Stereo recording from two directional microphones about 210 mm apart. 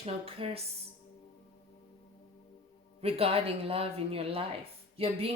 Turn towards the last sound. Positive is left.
turn(degrees=-25)  # may be behind; listen again after turning